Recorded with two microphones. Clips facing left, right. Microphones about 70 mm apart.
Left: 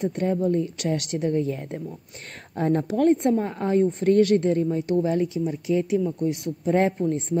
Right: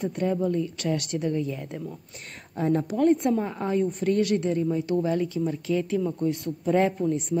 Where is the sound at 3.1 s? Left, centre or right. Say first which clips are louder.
Left 2 dB; left.